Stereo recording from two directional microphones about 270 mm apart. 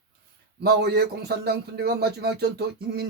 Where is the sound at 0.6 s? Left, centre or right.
Right.